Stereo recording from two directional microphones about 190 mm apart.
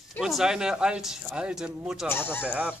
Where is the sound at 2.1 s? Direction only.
10° left (ahead or behind).